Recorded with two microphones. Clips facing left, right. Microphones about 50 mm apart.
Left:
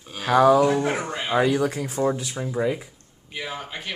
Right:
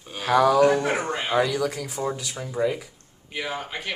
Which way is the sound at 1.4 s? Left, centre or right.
Left.